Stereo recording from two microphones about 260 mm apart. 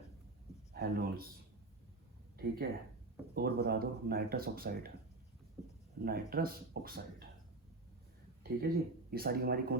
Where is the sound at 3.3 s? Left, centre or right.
Right.